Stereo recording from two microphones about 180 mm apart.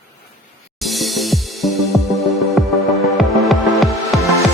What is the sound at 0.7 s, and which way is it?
Music, centre (ahead or behind).